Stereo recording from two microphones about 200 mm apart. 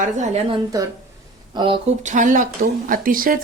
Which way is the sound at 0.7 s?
20° right (ahead or behind).